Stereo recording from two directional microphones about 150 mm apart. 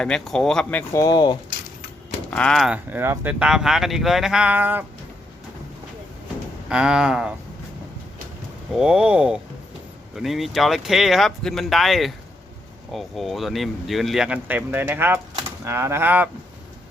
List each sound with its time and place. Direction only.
0.0 s speech: 5° left (ahead or behind)
0.9 s speech: 25° left (ahead or behind)
2.3 s speech: 5° left (ahead or behind); by 4.9 s 10° right (ahead or behind)
6.7 s speech: 5° right (ahead or behind)
8.7 s speech: 5° right (ahead or behind)